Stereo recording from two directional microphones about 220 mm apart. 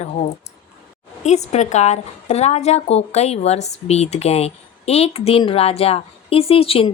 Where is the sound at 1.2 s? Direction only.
30° left (ahead or behind).